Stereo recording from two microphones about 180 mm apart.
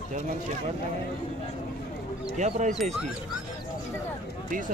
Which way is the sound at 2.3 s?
40° right (ahead or behind).